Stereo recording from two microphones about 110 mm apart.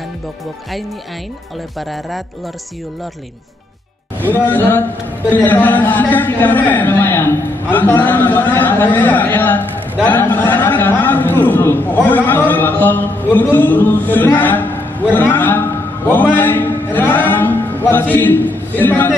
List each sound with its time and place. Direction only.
1.8 s speech: centre (ahead or behind)
4.3 s a man's voice: 15° left (ahead or behind)